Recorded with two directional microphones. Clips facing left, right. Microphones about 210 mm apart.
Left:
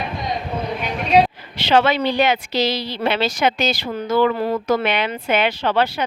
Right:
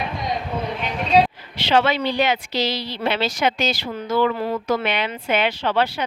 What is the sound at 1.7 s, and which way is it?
A woman's voice, 45° left (ahead or behind).